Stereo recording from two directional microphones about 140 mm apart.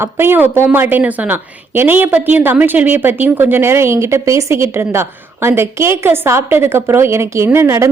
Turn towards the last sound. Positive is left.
turn(degrees=-20)  # may be behind; listen again after turning